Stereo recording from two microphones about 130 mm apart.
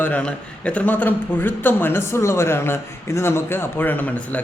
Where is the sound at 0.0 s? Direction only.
10° left (ahead or behind).